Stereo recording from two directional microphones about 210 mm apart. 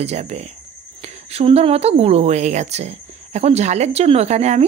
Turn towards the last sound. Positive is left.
turn(degrees=-30)  # may be behind; listen again after turning